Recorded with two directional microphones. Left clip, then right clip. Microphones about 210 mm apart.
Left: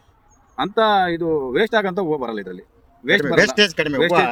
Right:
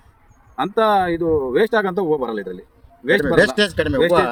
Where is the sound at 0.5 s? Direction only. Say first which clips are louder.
Even; centre (ahead or behind).